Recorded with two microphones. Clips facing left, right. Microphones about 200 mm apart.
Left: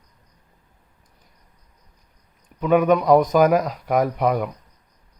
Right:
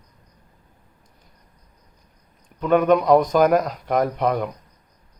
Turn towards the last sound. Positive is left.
turn(degrees=5)  # may be behind; listen again after turning